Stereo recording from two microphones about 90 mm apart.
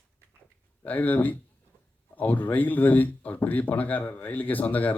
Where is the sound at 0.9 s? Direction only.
20° left (ahead or behind).